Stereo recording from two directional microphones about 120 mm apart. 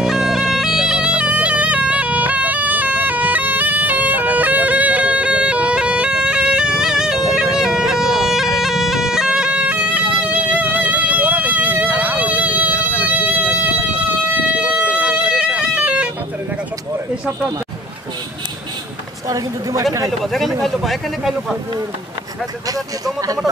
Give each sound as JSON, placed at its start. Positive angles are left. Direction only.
{"t": 0.0, "sound": "bagpipes", "side_deg": -5}
{"t": 10.2, "sound": "music", "side_deg": -15}
{"t": 19.2, "sound": "a woman's voice", "side_deg": -30}
{"t": 20.2, "sound": "speech", "side_deg": 0}
{"t": 20.6, "sound": "a sound", "side_deg": 0}
{"t": 22.7, "sound": "speech", "side_deg": -30}